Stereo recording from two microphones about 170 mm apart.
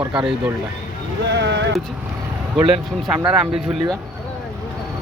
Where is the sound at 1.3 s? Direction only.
90° right.